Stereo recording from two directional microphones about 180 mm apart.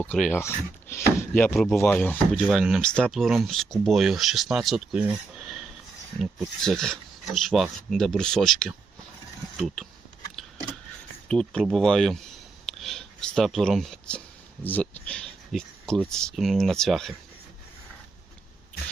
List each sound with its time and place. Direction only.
0.0 s speech: 5° left (ahead or behind)
2.4 s speech: 5° right (ahead or behind)
6.7 s speech: centre (ahead or behind)
9.6 s pulleys: centre (ahead or behind)
11.3 s speech: 5° left (ahead or behind)